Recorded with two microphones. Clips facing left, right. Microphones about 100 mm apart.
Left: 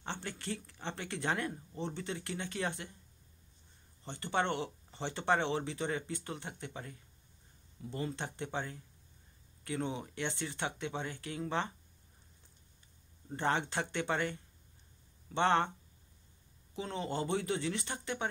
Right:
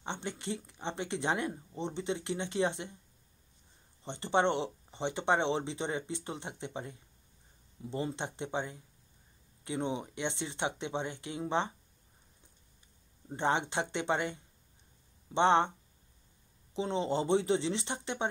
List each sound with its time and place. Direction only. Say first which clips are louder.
0.0 s speech: right 3 dB; 20° right (ahead or behind)
4.0 s speech: right 5 dB; 25° right (ahead or behind)
13.3 s speech: right 2 dB; 20° right (ahead or behind)
16.7 s speech: right 6 dB; 25° right (ahead or behind)